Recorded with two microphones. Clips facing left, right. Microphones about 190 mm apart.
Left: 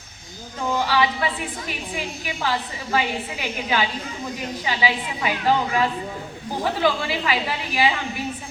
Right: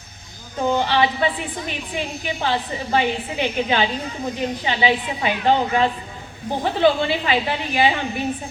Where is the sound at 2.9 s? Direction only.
30° right (ahead or behind).